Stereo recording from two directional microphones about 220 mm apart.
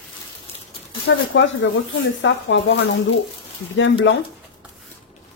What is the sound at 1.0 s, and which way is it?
Speech, 60° left (ahead or behind).